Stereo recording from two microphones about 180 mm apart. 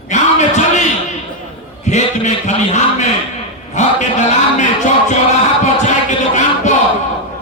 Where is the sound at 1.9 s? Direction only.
40° left (ahead or behind).